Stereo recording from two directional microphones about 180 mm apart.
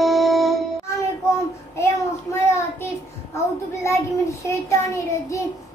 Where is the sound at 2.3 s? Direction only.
15° left (ahead or behind).